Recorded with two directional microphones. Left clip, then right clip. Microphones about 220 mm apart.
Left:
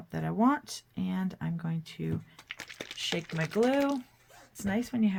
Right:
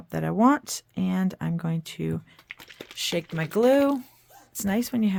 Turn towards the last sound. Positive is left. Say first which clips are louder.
# right 5 dB
turn(degrees=-55)  # may be behind; listen again after turning